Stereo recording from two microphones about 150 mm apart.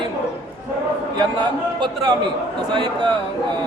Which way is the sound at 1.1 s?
30° right (ahead or behind).